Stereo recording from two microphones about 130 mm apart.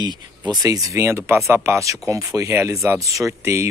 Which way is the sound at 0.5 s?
25° right (ahead or behind).